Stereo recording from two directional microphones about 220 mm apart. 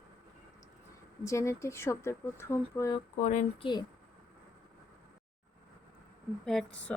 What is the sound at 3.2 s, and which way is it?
Speech, 35° left (ahead or behind).